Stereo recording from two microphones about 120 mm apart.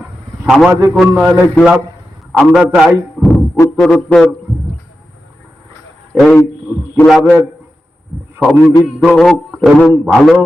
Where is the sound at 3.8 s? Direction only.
5° left (ahead or behind).